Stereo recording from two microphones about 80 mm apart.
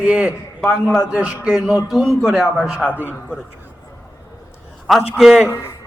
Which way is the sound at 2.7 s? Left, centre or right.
Centre.